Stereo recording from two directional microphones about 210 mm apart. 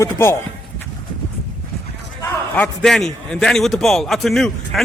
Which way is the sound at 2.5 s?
5° left (ahead or behind).